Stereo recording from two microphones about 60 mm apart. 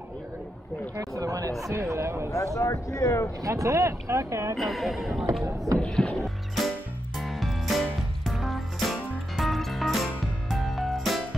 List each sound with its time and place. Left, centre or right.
0.9 s a sound: right
1.7 s speech: right
2.3 s speech: left
3.4 s speech: right
4.6 s speech: centre
5.4 s speech: right
5.8 s music: centre